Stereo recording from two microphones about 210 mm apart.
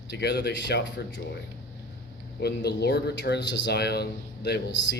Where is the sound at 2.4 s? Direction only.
50° left (ahead or behind).